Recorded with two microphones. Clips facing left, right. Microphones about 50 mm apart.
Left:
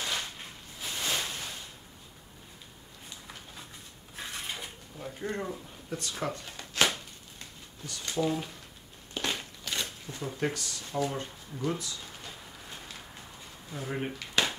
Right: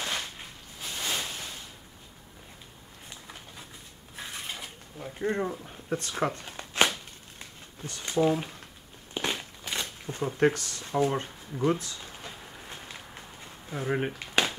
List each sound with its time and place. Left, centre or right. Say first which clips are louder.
0.9 s a sound: even; centre
4.2 s a sound: even; centre
5.2 s speech: right 6 dB; centre
5.7 s shuffling cards: right 5 dB; right
8.0 s speech: right 5 dB; right
9.1 s a sound: right 2 dB; centre
10.1 s speech: right 8 dB; right
11.8 s speech: even; right
12.1 s walk: right 2 dB; right